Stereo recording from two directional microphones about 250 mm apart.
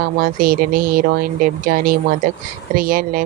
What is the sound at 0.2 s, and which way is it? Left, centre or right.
Speech, right.